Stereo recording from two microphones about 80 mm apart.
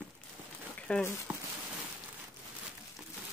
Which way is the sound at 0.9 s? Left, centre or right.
Centre.